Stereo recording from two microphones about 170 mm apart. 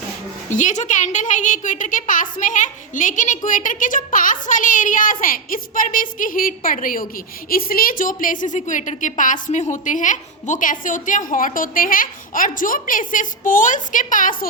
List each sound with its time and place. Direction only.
0.5 s a woman's voice: 45° left (ahead or behind)